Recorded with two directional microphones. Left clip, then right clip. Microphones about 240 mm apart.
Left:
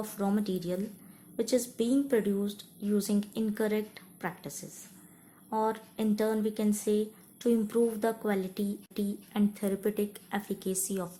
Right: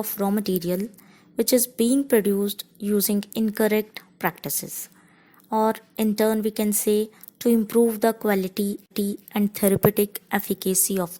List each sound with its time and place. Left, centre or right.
0.0 s speech: right